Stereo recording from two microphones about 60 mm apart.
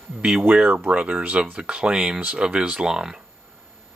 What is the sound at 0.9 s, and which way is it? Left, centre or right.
Speech, right.